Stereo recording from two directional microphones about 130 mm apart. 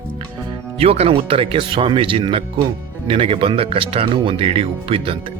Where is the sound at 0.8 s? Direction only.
50° right (ahead or behind).